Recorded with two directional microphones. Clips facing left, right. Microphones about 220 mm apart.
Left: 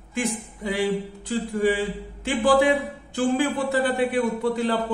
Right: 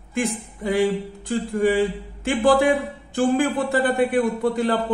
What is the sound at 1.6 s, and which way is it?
Speech, 50° right (ahead or behind).